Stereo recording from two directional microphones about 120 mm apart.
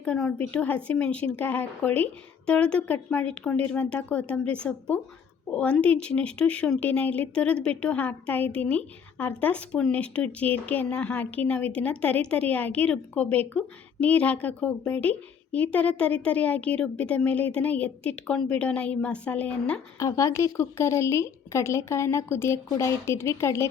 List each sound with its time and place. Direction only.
0.0 s speech: 10° left (ahead or behind)
20.0 s speech: 25° left (ahead or behind)